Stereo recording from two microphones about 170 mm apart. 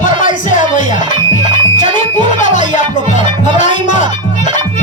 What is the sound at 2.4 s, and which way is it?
Music, 45° left (ahead or behind).